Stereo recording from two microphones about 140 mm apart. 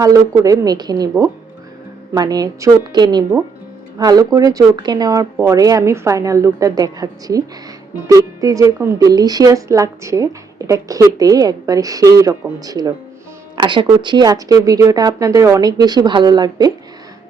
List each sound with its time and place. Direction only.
0.0 s speech: 25° right (ahead or behind)
2.1 s speech: 25° right (ahead or behind)